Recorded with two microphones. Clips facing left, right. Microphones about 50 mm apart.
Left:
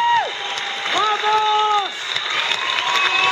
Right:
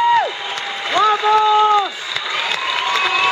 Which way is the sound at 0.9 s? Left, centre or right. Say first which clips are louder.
Right 4 dB; centre.